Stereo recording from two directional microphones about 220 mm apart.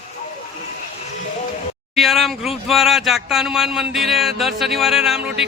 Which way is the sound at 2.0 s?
Centre (ahead or behind).